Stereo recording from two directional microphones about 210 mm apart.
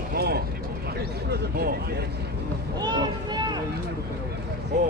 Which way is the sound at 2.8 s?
20° right (ahead or behind).